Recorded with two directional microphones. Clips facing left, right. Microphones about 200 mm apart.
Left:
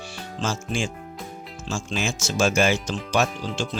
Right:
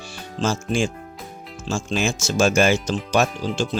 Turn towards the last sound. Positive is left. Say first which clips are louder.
# right 3 dB
turn(degrees=-40)  # may be behind; listen again after turning